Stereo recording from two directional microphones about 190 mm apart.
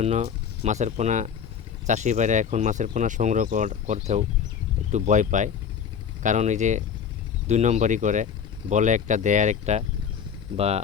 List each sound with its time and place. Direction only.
0.0 s speech: 35° right (ahead or behind)